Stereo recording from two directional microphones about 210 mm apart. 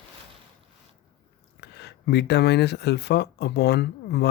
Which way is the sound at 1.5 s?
50° left (ahead or behind).